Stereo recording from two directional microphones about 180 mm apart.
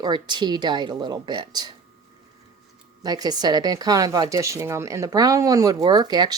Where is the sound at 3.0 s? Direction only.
20° right (ahead or behind).